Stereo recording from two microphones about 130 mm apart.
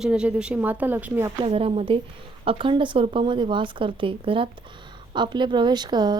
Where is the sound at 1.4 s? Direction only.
45° right (ahead or behind).